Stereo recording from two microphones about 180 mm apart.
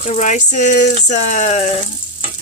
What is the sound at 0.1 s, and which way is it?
Speech, 40° left (ahead or behind).